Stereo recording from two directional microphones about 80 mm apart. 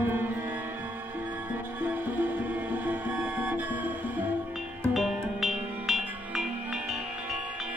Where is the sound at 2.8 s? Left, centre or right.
Right.